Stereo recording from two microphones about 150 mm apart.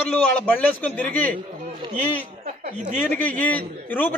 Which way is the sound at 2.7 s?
55° right (ahead or behind).